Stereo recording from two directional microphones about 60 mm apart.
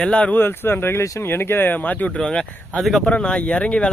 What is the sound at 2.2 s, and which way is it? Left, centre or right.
Speech, centre.